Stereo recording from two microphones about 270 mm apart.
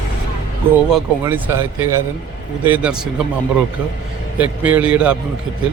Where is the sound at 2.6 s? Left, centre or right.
Centre.